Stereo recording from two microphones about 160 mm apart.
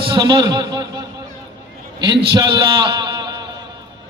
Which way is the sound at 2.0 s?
30° right (ahead or behind).